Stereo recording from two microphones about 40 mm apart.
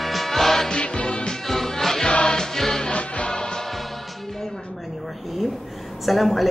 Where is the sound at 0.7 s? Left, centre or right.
Left.